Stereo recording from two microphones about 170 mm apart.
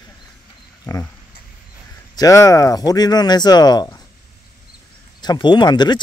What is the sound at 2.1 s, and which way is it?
Speech, 20° left (ahead or behind).